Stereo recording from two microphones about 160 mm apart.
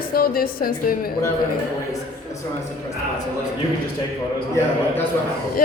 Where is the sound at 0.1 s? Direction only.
65° left (ahead or behind).